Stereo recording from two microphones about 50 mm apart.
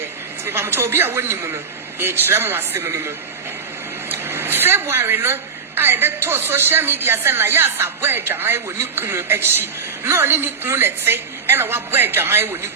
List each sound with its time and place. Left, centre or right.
0.4 s speech: right
2.8 s a man's voice: right
4.1 s speech: right